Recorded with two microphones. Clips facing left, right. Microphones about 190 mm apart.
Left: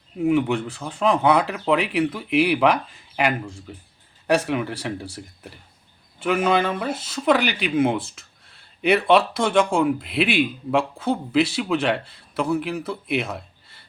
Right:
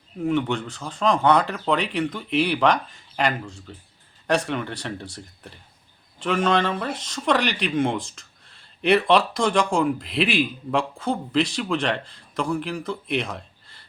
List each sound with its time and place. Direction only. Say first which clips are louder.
0.2 s speech: left 3 dB; 5° left (ahead or behind)